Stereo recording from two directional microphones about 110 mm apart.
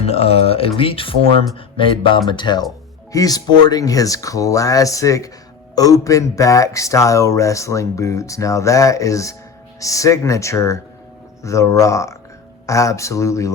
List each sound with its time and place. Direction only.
0.0 s speech: 65° left (ahead or behind); by 13.5 s 30° left (ahead or behind)